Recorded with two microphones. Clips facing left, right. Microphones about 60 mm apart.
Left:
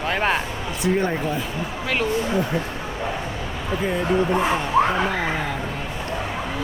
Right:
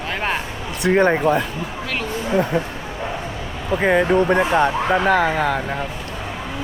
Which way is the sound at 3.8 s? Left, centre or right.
Right.